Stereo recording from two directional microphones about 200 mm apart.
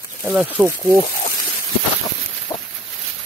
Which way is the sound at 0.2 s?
5° right (ahead or behind).